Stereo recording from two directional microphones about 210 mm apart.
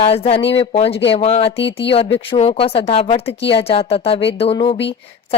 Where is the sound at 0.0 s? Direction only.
25° left (ahead or behind).